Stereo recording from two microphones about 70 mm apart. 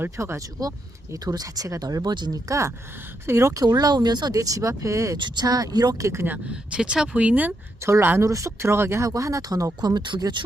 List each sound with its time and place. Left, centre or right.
0.2 s speech: right
1.1 s speech: right
2.5 s speech: right
5.1 s speech: right
6.0 s speech: right
6.5 s speech: centre
7.8 s speech: right
9.0 s speech: right